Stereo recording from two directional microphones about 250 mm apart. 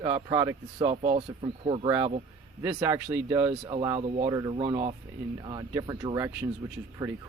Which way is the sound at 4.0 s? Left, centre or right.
Right.